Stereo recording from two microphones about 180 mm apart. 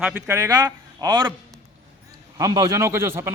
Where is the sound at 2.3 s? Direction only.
20° right (ahead or behind).